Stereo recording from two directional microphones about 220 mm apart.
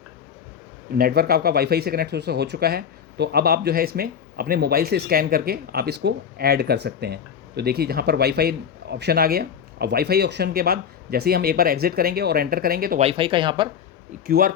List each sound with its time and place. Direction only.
0.9 s speech: 45° right (ahead or behind)
13.0 s speech: 25° right (ahead or behind)
14.3 s speech: 40° right (ahead or behind)